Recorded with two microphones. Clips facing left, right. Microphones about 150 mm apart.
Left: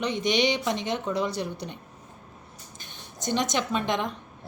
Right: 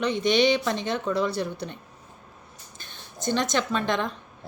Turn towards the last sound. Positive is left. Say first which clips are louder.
# right 1 dB
turn(degrees=15)  # may be behind; listen again after turning